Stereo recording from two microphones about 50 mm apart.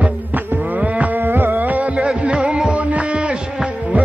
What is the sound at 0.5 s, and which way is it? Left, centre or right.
Livestock, right.